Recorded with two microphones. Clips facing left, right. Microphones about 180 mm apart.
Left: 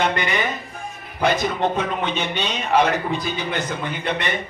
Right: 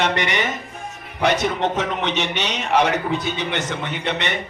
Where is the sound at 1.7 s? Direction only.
80° right.